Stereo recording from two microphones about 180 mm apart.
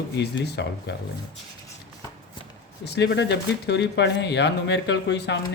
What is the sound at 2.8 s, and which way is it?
Speech, 70° left (ahead or behind).